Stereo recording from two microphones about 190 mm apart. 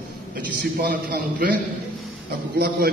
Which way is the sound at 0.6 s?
55° right (ahead or behind).